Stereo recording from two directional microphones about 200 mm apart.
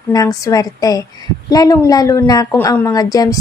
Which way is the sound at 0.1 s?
15° left (ahead or behind).